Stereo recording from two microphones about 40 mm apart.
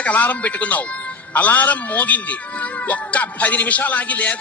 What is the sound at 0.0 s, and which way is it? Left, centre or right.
A man's voice, left.